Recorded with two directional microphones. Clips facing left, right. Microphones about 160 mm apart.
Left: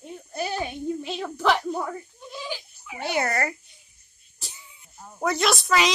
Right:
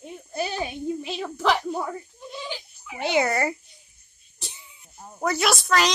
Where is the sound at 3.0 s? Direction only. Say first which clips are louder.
Right 3 dB; 20° right (ahead or behind).